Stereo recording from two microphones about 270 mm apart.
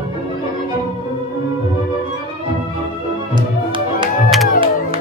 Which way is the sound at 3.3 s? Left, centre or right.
Centre.